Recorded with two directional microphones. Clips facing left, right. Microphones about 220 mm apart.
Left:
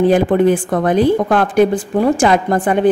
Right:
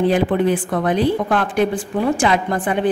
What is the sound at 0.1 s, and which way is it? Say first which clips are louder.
A woman's voice: left 5 dB; 45° left (ahead or behind).